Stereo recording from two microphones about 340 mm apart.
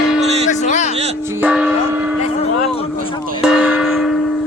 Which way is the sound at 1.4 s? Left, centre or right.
Centre.